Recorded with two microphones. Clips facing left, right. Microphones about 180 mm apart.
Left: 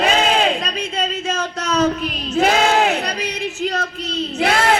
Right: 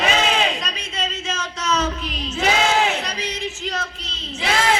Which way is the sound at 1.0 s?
55° left (ahead or behind).